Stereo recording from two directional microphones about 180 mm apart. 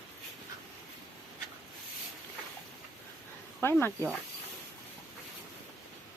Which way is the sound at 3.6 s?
10° left (ahead or behind).